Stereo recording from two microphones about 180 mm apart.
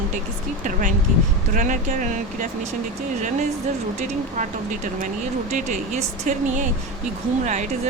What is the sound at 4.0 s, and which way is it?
Speech, 45° right (ahead or behind).